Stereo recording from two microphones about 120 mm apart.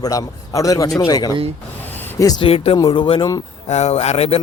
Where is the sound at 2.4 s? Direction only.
55° left (ahead or behind).